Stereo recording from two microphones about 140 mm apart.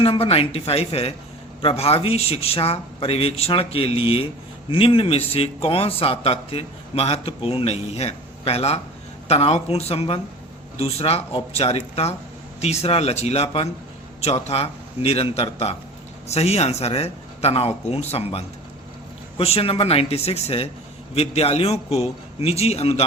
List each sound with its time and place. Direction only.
0.0 s a man's voice: 45° left (ahead or behind)